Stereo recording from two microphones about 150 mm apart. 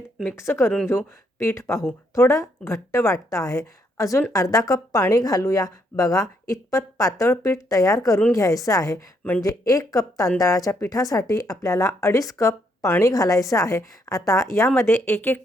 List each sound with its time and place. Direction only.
0.3 s speech: 15° left (ahead or behind)